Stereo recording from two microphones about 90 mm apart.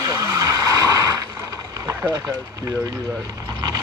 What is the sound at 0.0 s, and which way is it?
Vehicle, 45° right (ahead or behind).